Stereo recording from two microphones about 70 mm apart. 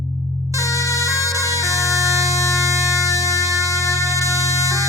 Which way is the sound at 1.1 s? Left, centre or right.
Left.